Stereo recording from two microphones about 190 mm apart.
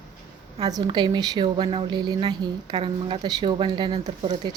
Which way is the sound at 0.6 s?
20° right (ahead or behind).